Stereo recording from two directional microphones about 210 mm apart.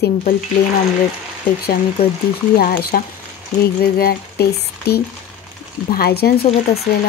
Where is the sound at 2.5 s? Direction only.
50° left (ahead or behind).